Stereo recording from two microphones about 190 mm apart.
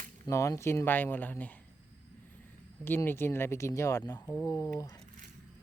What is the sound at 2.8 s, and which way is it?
Speech, 10° left (ahead or behind).